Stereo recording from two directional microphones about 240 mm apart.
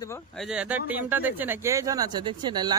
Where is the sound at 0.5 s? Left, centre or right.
Centre.